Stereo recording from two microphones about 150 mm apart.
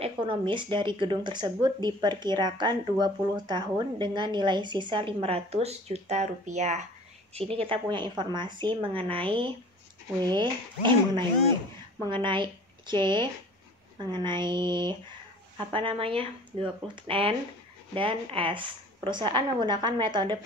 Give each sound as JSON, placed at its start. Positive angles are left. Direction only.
{"t": 0.0, "sound": "speech", "side_deg": -35}
{"t": 7.3, "sound": "speech", "side_deg": -40}